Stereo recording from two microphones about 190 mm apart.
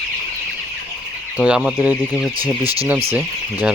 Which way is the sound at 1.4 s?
5° right (ahead or behind).